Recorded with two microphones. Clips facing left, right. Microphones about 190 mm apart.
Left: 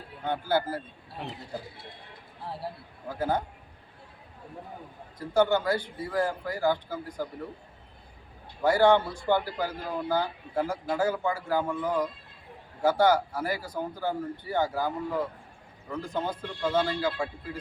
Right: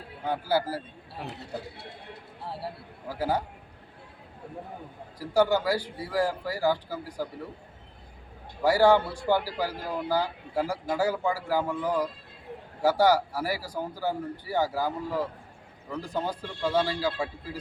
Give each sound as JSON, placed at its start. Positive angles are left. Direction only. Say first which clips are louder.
{"t": 0.3, "sound": "a man's voice", "louder": "even", "side_deg": -5}
{"t": 1.3, "sound": "speech", "louder": "right 1 dB", "side_deg": -70}
{"t": 3.2, "sound": "a man's voice", "louder": "even", "side_deg": -10}
{"t": 5.2, "sound": "a man's voice", "louder": "even", "side_deg": -10}
{"t": 8.6, "sound": "a man's voice", "louder": "right 1 dB", "side_deg": -10}